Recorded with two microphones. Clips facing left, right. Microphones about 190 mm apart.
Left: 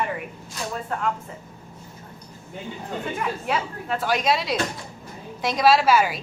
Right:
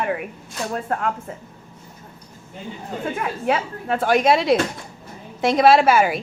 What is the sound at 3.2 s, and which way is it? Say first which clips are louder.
A woman's voice: right 5 dB; 55° right (ahead or behind).